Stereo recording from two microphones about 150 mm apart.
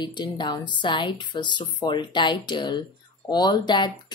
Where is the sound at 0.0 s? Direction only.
30° left (ahead or behind).